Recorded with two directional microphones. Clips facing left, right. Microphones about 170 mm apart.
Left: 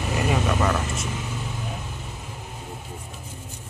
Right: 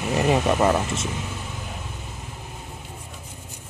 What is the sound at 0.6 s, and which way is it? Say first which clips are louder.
Speech: right 4 dB; 25° right (ahead or behind).